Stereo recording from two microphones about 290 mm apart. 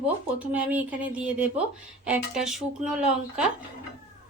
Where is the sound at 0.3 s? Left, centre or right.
Centre.